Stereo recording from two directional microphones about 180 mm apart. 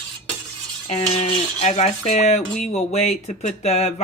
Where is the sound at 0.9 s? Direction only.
35° left (ahead or behind).